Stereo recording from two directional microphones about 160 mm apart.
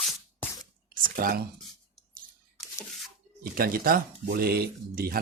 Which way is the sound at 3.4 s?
65° right (ahead or behind).